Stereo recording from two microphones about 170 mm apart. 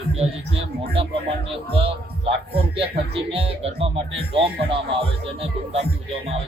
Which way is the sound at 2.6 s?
35° right (ahead or behind).